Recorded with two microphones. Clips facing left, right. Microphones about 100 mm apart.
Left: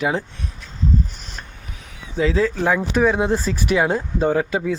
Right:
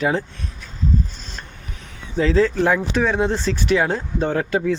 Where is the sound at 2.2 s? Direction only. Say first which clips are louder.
Right 2 dB; 10° left (ahead or behind).